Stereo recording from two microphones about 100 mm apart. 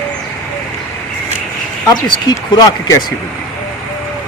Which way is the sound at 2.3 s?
45° left (ahead or behind).